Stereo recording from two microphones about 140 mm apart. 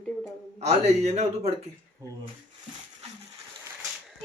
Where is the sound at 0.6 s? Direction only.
50° right (ahead or behind).